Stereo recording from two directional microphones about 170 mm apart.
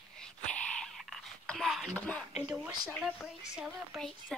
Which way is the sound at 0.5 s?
5° left (ahead or behind).